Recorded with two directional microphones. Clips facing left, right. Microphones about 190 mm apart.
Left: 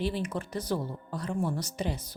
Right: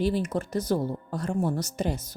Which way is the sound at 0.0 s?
40° right (ahead or behind).